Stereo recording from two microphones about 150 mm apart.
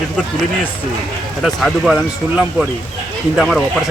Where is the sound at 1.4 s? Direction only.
Centre (ahead or behind).